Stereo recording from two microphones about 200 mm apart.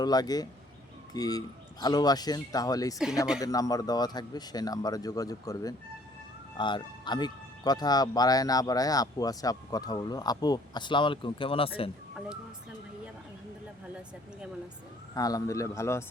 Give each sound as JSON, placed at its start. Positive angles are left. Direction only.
{"t": 0.0, "sound": "speech", "side_deg": 20}
{"t": 15.1, "sound": "speech", "side_deg": 20}